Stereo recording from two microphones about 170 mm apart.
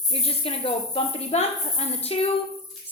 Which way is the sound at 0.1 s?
35° left (ahead or behind).